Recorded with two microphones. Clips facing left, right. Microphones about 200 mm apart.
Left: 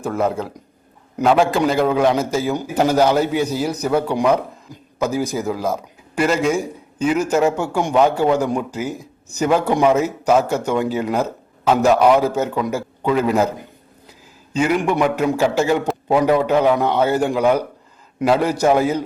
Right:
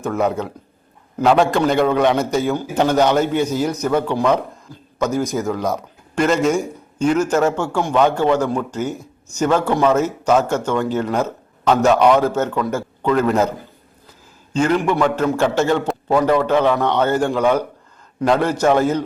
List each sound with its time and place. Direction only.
0.0 s a man's voice: 5° left (ahead or behind)
14.5 s speech: 10° left (ahead or behind)